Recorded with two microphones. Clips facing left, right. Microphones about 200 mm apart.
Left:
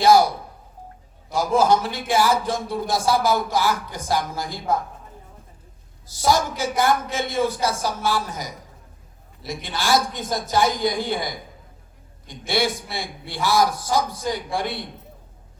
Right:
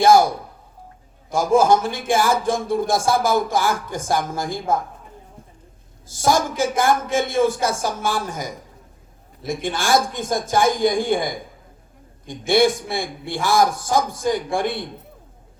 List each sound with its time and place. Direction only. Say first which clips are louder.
0.0 s a sound: right 2 dB; 50° right (ahead or behind)
1.3 s a man's voice: right 3 dB; 50° right (ahead or behind)
6.1 s a man's voice: right 1 dB; 50° right (ahead or behind)